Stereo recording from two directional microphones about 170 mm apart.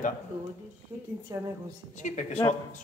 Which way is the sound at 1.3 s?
20° right (ahead or behind).